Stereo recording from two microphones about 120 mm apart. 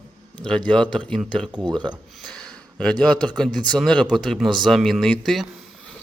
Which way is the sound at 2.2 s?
5° left (ahead or behind).